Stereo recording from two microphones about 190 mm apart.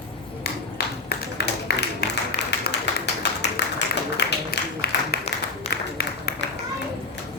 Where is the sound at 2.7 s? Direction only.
65° left (ahead or behind).